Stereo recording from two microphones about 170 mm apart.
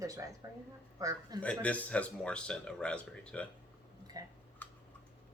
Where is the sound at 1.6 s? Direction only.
10° left (ahead or behind).